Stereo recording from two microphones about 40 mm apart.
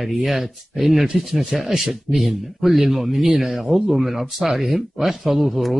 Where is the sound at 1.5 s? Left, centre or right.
Centre.